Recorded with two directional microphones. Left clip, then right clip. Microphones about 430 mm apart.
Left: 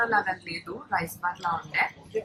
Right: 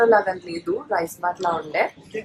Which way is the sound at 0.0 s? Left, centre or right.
Centre.